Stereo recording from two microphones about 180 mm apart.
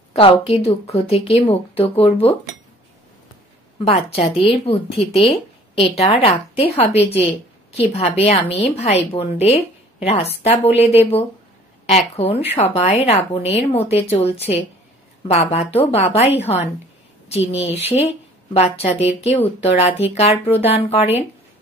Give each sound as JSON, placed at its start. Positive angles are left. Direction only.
{"t": 0.1, "sound": "speech", "side_deg": 35}
{"t": 3.8, "sound": "speech", "side_deg": 35}
{"t": 17.7, "sound": "speech", "side_deg": 35}